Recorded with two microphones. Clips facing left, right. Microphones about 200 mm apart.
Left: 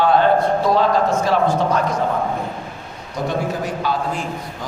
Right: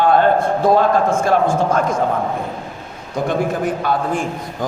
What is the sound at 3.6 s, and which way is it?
Speech, 55° right (ahead or behind).